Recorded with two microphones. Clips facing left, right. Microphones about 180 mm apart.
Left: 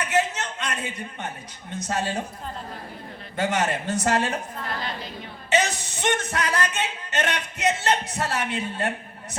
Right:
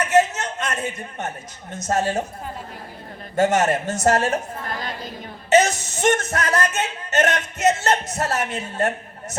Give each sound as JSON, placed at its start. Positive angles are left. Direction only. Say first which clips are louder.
{"t": 0.0, "sound": "a sound", "louder": "right 6 dB", "side_deg": -45}
{"t": 1.8, "sound": "speech", "louder": "right 5 dB", "side_deg": -45}
{"t": 3.3, "sound": "speech", "louder": "right 6 dB", "side_deg": -45}
{"t": 5.5, "sound": "speech", "louder": "right 7 dB", "side_deg": -45}